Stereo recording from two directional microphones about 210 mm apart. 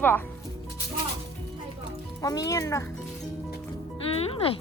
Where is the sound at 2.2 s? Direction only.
15° left (ahead or behind).